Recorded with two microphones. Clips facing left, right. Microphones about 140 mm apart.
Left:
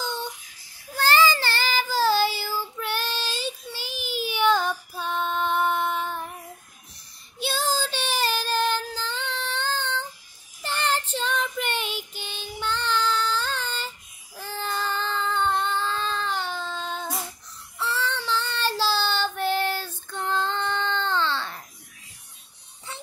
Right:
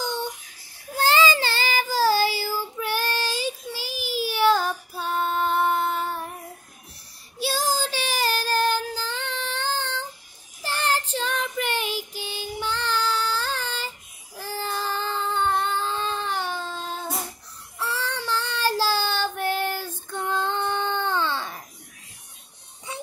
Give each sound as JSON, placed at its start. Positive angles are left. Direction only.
{"t": 0.0, "sound": "a sound", "side_deg": -15}
{"t": 0.9, "sound": "child singing", "side_deg": -20}
{"t": 7.3, "sound": "child singing", "side_deg": -10}